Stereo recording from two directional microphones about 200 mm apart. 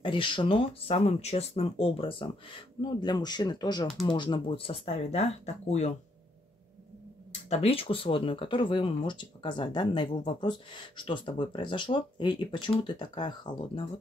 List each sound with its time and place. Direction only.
0.0 s speech: 25° left (ahead or behind)
7.4 s speech: 30° left (ahead or behind)